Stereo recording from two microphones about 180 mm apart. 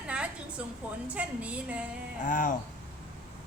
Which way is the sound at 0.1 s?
5° right (ahead or behind).